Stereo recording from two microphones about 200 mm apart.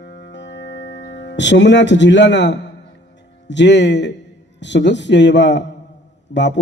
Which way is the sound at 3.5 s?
60° left (ahead or behind).